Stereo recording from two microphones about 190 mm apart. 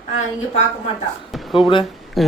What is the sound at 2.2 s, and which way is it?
Speech, centre (ahead or behind).